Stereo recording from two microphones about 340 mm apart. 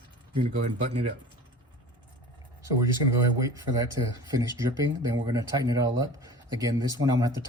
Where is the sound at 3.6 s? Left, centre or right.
Centre.